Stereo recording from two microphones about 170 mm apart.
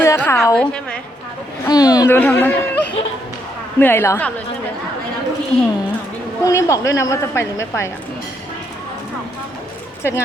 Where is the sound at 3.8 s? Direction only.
15° left (ahead or behind).